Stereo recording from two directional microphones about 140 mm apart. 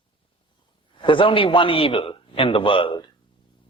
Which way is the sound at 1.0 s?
35° left (ahead or behind).